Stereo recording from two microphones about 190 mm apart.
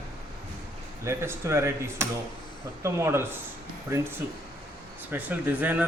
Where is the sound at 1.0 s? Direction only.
15° right (ahead or behind).